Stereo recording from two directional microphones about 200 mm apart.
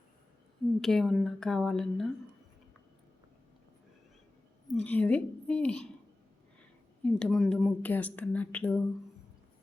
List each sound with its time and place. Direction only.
0.8 s speech: centre (ahead or behind)
4.7 s speech: 5° left (ahead or behind)
7.0 s speech: 5° left (ahead or behind)